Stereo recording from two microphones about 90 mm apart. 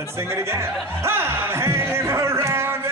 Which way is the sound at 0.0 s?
30° right (ahead or behind).